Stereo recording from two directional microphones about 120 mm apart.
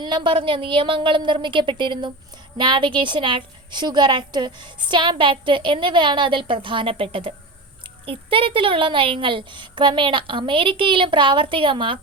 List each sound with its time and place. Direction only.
0.0 s a woman's voice: 40° right (ahead or behind)